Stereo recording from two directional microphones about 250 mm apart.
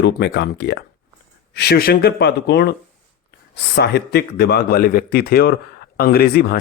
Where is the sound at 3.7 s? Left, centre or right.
Left.